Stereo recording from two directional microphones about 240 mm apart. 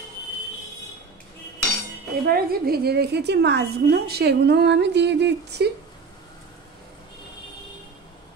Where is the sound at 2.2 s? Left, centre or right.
Right.